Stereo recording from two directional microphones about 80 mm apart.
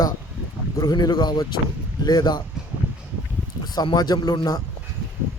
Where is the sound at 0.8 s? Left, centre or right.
Left.